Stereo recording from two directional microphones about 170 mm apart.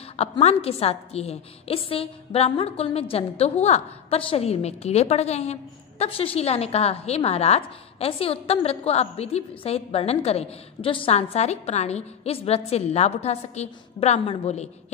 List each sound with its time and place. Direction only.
0.1 s a woman's voice: 40° left (ahead or behind)